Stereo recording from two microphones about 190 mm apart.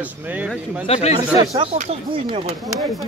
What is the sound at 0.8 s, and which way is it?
Speech, 30° left (ahead or behind).